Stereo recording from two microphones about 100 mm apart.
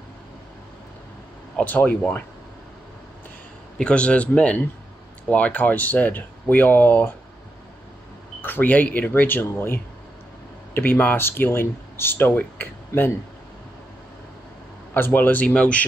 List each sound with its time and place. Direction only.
1.6 s speech: 15° left (ahead or behind)
3.7 s speech: 10° left (ahead or behind)
8.4 s speech: 20° left (ahead or behind)
15.0 s speech: 20° left (ahead or behind)